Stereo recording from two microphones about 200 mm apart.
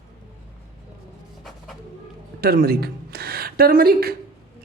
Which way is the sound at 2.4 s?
50° right (ahead or behind).